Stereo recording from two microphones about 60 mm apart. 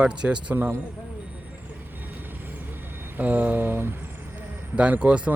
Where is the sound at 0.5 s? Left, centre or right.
Right.